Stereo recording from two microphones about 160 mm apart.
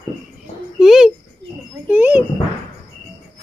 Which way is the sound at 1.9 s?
10° right (ahead or behind).